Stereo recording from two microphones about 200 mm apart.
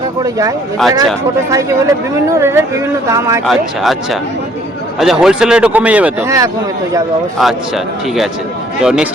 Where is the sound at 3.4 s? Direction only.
Centre (ahead or behind).